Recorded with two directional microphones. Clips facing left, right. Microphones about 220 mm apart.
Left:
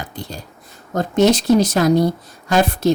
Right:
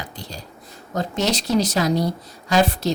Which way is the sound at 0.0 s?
50° left (ahead or behind).